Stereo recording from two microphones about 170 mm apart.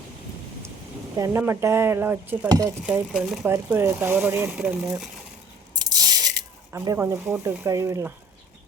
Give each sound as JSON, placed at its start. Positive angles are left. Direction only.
{"t": 1.1, "sound": "speech", "side_deg": -20}
{"t": 2.8, "sound": "speech", "side_deg": -5}
{"t": 5.8, "sound": "a sound", "side_deg": -25}
{"t": 6.7, "sound": "speech", "side_deg": -15}